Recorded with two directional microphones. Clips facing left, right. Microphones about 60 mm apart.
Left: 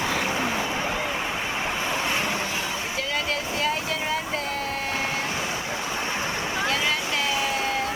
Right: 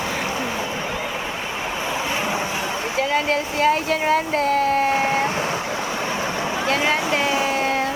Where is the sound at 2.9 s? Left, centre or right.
Right.